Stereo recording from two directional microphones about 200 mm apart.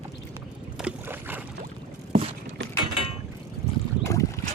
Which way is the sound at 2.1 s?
30° right (ahead or behind).